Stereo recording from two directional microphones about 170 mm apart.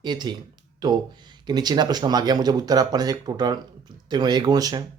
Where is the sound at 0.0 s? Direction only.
25° right (ahead or behind).